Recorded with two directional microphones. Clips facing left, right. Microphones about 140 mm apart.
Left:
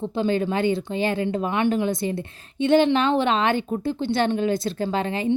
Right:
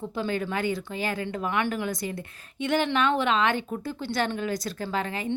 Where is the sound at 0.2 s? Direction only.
25° left (ahead or behind).